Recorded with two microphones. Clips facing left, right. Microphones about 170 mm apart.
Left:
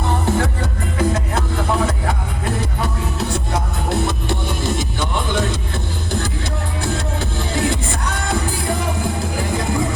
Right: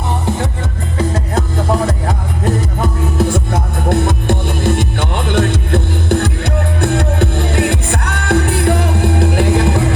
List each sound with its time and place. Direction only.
1.9 s music: 40° right (ahead or behind); by 9.9 s 75° right (ahead or behind)